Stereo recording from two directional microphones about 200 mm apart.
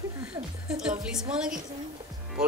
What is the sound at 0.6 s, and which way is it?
Music, 5° right (ahead or behind).